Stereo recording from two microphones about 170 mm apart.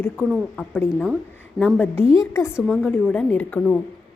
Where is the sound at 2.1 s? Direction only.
15° left (ahead or behind).